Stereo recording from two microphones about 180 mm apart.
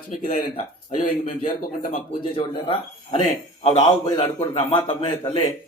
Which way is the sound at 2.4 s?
30° left (ahead or behind).